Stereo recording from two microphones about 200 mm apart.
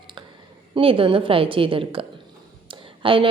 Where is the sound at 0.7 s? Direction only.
25° right (ahead or behind).